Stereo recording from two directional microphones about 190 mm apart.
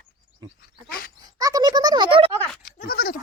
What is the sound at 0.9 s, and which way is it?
Dog, 50° left (ahead or behind).